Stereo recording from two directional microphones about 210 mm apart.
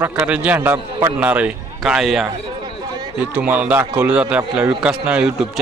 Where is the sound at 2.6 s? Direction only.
20° right (ahead or behind).